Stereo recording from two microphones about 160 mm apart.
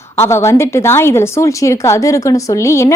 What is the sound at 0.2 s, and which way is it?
A woman's voice, 15° left (ahead or behind).